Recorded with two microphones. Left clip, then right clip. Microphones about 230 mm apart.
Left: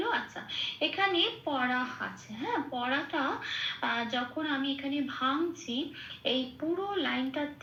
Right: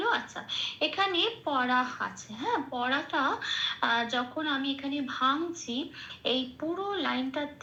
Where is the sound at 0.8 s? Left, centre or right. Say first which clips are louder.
Even; centre.